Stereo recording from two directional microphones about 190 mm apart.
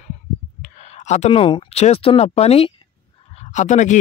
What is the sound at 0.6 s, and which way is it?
Speech, 35° left (ahead or behind).